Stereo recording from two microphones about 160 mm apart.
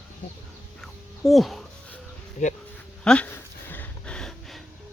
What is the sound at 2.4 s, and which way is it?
Speech, 45° left (ahead or behind).